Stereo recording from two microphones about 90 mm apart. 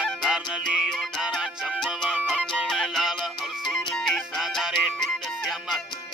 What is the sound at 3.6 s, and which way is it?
Music, 5° left (ahead or behind).